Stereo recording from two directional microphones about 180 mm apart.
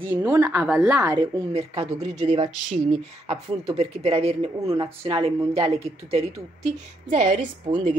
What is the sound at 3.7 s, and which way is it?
A woman's voice, 35° right (ahead or behind).